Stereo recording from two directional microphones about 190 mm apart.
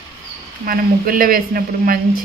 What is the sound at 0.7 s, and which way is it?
Speech, 50° right (ahead or behind).